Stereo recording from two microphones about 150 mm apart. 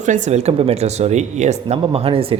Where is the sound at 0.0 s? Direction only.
50° right (ahead or behind).